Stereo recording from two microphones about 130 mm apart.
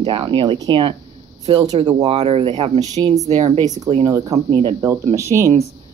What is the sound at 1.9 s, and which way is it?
Speech, 50° right (ahead or behind).